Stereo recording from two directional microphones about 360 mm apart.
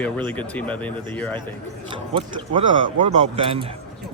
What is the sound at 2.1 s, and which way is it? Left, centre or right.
A man's voice, centre.